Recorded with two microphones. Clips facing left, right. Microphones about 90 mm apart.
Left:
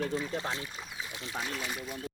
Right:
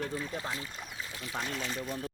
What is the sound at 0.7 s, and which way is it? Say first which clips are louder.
Speech: left 1 dB; centre (ahead or behind).